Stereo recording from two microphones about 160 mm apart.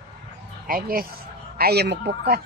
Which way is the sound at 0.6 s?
65° right (ahead or behind).